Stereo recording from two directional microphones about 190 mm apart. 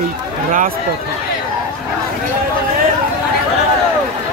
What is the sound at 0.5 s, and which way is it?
Speech, 45° right (ahead or behind).